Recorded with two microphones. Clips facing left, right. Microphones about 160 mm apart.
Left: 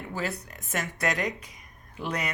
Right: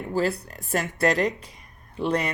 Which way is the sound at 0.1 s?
35° right (ahead or behind).